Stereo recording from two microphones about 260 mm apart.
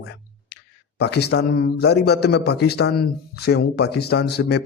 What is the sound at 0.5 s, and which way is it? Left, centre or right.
Speech, left.